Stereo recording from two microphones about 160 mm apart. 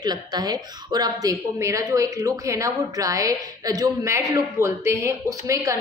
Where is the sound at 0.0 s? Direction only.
25° right (ahead or behind).